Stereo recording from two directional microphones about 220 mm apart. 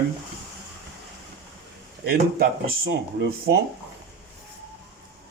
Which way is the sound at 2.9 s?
50° right (ahead or behind).